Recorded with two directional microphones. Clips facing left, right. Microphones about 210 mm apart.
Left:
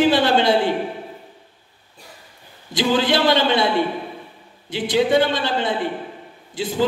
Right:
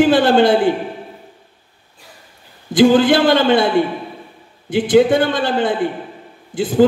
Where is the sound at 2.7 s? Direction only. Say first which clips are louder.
Right 8 dB; 50° right (ahead or behind).